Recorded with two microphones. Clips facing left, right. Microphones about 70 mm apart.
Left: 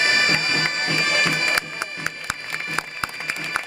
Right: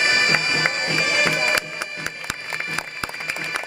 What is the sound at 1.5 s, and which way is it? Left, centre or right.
Music, left.